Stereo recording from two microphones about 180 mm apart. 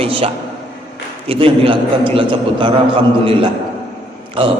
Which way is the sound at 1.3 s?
30° right (ahead or behind).